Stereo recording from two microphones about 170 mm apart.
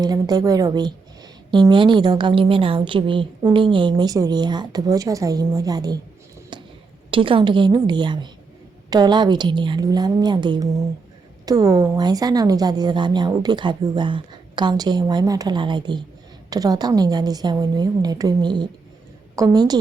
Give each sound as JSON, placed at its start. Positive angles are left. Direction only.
{"t": 0.0, "sound": "a woman's voice", "side_deg": -25}
{"t": 6.5, "sound": "a sound", "side_deg": -25}
{"t": 7.1, "sound": "a woman's voice", "side_deg": -30}